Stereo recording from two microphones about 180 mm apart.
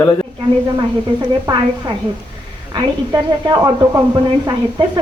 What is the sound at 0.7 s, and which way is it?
A woman's voice, 25° right (ahead or behind).